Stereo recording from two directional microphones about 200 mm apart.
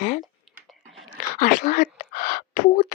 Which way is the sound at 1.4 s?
45° left (ahead or behind).